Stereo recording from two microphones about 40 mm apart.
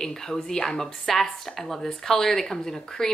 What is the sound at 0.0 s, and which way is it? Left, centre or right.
Speech, centre.